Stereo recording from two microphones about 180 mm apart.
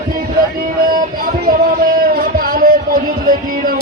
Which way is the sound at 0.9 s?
55° right (ahead or behind).